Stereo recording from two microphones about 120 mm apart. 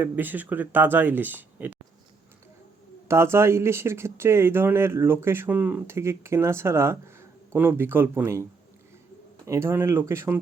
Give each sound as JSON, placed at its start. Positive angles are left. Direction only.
{"t": 0.0, "sound": "speech", "side_deg": -15}
{"t": 3.1, "sound": "speech", "side_deg": -20}
{"t": 9.5, "sound": "speech", "side_deg": -25}